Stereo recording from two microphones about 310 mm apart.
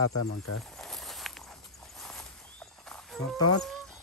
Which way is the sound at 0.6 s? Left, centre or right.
Centre.